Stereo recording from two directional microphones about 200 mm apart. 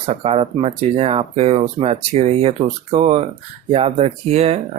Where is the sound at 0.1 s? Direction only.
30° right (ahead or behind).